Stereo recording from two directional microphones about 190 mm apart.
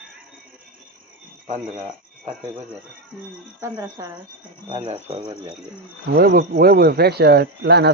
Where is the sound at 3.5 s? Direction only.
15° right (ahead or behind).